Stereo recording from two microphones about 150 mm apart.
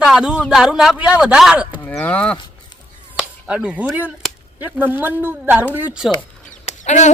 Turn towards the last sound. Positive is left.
turn(degrees=50)  # may be behind; listen again after turning